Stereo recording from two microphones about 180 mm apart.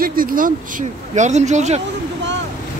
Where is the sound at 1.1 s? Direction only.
40° right (ahead or behind).